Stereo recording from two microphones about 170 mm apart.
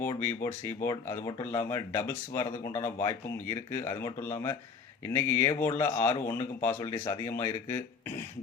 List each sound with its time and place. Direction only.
0.0 s speech: 15° left (ahead or behind)